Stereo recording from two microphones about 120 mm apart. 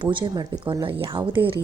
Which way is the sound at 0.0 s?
45° right (ahead or behind).